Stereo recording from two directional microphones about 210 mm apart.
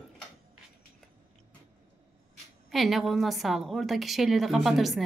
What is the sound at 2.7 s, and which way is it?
A woman's voice, centre (ahead or behind).